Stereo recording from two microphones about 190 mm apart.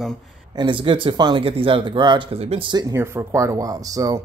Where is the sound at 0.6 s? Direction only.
25° right (ahead or behind).